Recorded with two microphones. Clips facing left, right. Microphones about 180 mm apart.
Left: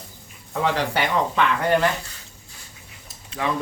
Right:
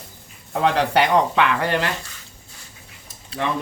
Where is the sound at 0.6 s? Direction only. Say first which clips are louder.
Right 4 dB; 70° right (ahead or behind).